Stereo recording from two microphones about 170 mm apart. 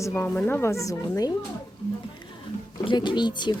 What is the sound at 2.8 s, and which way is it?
Speech, 30° left (ahead or behind).